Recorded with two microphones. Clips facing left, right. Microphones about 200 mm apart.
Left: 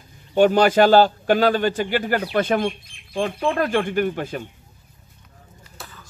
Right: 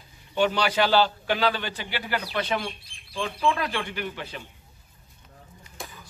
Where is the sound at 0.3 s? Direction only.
45° left (ahead or behind).